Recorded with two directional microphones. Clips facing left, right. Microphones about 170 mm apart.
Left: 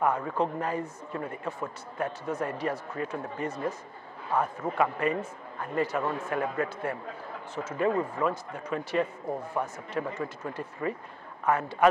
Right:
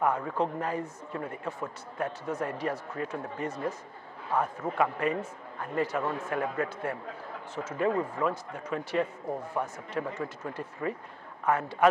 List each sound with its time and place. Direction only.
0.0 s a man's voice: 25° left (ahead or behind)